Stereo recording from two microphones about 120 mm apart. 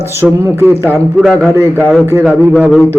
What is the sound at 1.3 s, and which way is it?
Speech, centre (ahead or behind).